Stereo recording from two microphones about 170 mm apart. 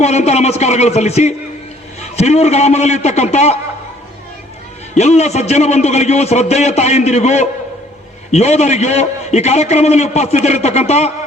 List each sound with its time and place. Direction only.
0.0 s a man's voice: 40° left (ahead or behind)
4.9 s a man's voice: 40° left (ahead or behind)